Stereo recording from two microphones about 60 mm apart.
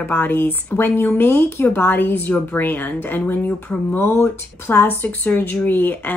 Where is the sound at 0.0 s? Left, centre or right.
Left.